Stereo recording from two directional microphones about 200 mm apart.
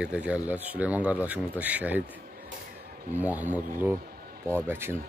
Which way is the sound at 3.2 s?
10° right (ahead or behind).